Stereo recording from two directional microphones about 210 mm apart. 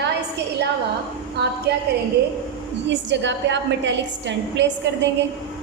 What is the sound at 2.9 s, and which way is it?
A woman's voice, 55° right (ahead or behind).